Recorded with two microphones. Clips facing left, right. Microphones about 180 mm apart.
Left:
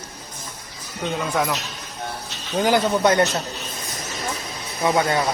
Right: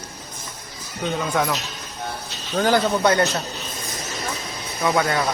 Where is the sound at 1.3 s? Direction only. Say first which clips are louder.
Even; centre (ahead or behind).